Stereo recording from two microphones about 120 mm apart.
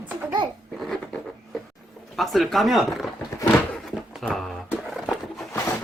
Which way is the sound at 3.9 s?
Centre (ahead or behind).